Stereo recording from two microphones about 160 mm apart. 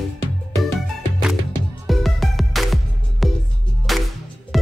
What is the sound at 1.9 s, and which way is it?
Music, centre (ahead or behind).